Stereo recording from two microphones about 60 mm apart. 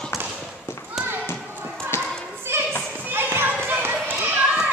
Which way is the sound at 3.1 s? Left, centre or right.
Right.